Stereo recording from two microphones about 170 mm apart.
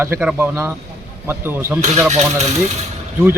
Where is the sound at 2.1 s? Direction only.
40° right (ahead or behind).